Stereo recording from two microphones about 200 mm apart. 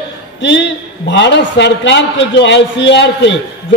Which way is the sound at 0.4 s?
60° left (ahead or behind).